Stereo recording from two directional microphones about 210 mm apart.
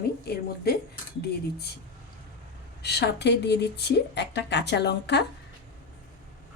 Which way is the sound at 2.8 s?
50° left (ahead or behind).